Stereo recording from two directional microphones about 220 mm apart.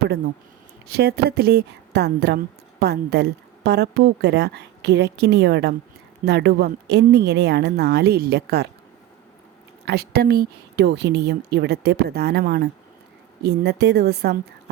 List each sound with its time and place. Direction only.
0.9 s speech: 45° right (ahead or behind)
9.8 s speech: 45° right (ahead or behind)